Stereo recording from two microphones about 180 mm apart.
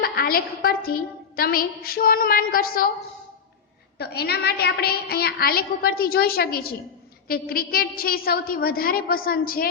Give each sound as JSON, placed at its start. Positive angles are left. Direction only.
{"t": 0.0, "sound": "a woman's voice", "side_deg": 55}
{"t": 3.9, "sound": "a woman's voice", "side_deg": 60}